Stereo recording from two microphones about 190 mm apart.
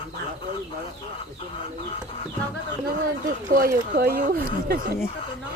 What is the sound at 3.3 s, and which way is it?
Speech, 50° right (ahead or behind).